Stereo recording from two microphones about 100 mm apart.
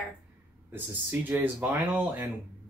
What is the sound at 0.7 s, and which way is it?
Speech, 20° right (ahead or behind).